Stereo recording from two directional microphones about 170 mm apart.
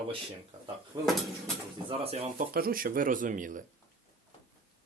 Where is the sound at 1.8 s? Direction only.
35° right (ahead or behind).